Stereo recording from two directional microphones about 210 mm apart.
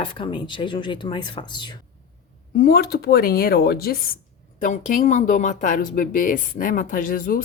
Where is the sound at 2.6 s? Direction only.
45° left (ahead or behind).